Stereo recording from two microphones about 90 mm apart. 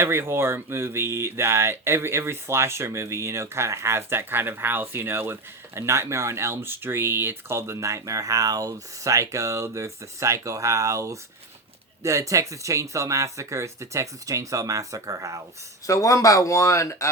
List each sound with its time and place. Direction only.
0.0 s speech: 25° right (ahead or behind)
15.9 s speech: 40° left (ahead or behind)